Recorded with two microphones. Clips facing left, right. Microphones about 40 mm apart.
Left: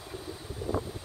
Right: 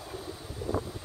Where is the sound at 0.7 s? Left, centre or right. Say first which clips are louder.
Even; left.